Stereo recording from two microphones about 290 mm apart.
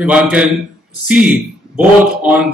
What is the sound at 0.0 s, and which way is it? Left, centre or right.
A man's voice, centre.